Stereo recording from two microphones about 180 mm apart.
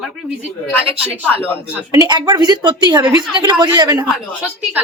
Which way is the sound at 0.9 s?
30° right (ahead or behind).